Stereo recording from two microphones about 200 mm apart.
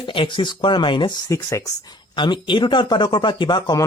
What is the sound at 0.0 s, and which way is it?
Speech, 25° left (ahead or behind).